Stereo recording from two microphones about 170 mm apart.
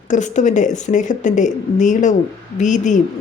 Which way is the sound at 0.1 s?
45° left (ahead or behind).